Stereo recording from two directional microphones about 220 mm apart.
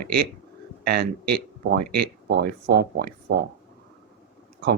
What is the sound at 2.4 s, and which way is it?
Speech, 45° right (ahead or behind).